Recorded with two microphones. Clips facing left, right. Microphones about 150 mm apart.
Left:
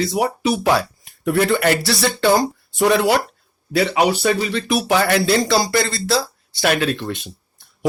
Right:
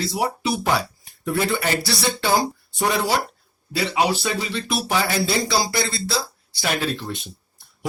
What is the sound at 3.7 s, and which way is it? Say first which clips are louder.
Speech: left 4 dB; 60° left (ahead or behind).